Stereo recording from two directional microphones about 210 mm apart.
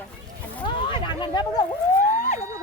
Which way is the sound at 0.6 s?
25° left (ahead or behind).